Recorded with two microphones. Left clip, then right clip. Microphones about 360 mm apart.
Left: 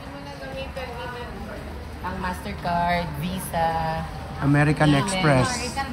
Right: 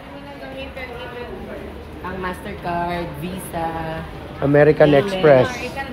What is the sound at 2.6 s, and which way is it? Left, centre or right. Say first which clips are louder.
Speech: left 1 dB; left.